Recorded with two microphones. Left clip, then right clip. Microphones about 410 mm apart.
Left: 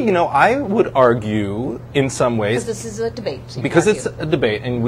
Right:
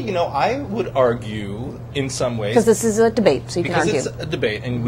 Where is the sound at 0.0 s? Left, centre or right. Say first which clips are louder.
Left 5 dB; left.